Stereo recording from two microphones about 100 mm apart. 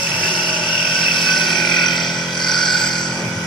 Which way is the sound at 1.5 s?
50° left (ahead or behind).